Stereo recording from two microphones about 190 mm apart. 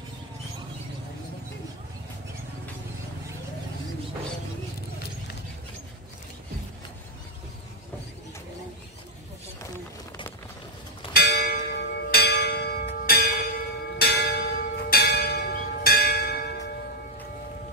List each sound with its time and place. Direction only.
11.1 s church bell: 55° left (ahead or behind)